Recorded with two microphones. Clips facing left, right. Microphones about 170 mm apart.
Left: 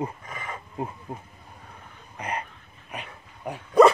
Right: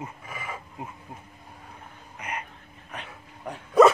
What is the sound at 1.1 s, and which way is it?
Speech, 45° left (ahead or behind).